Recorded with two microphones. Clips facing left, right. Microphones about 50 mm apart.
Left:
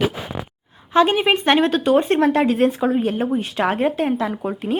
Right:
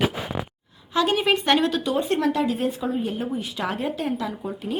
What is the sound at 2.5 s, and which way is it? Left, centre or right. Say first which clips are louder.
A woman's voice: left 7 dB; left.